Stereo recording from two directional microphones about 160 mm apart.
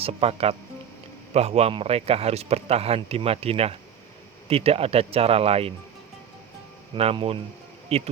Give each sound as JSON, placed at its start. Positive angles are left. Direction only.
{"t": 0.0, "sound": "a man's voice", "side_deg": -40}
{"t": 6.9, "sound": "a man's voice", "side_deg": -35}